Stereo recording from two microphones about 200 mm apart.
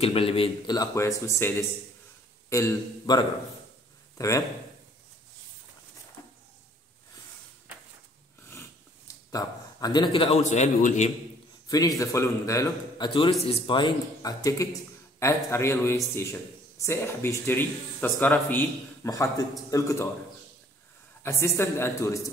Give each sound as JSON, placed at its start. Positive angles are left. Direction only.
{"t": 0.0, "sound": "a man's voice", "side_deg": 30}
{"t": 2.5, "sound": "a man's voice", "side_deg": 15}
{"t": 8.5, "sound": "a sound", "side_deg": 15}
{"t": 11.6, "sound": "a man's voice", "side_deg": 20}
{"t": 21.2, "sound": "a man's voice", "side_deg": 15}